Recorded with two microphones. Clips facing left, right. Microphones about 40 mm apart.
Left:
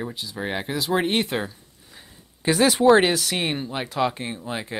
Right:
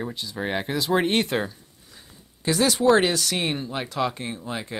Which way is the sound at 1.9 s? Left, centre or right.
Centre.